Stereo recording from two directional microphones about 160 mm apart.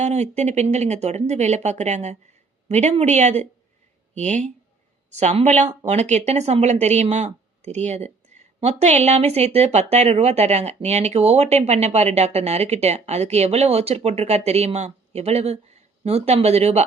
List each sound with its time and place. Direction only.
0.0 s speech: 45° right (ahead or behind)